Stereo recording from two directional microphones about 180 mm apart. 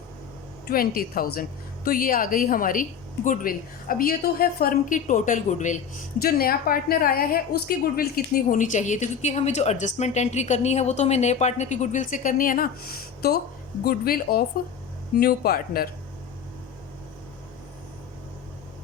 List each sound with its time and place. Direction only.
0.7 s a woman's voice: 55° left (ahead or behind)
6.2 s a woman's voice: 55° left (ahead or behind)